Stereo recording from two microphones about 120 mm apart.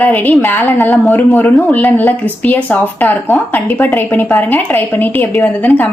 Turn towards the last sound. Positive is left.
turn(degrees=15)  # may be behind; listen again after turning